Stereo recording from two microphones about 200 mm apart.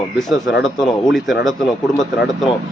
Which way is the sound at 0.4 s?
70° left (ahead or behind).